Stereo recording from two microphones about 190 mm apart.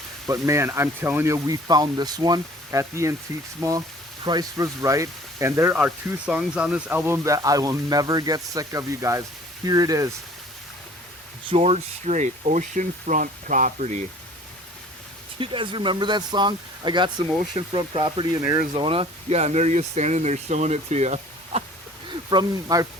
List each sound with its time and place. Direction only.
0.3 s speech: 15° right (ahead or behind)
11.4 s speech: 30° right (ahead or behind)
15.4 s speech: 25° right (ahead or behind)
22.3 s speech: 20° right (ahead or behind)